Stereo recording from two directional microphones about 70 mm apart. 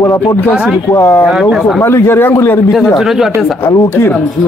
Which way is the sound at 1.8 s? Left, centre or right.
Left.